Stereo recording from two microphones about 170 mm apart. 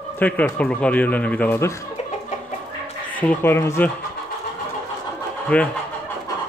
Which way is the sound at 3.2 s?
10° left (ahead or behind).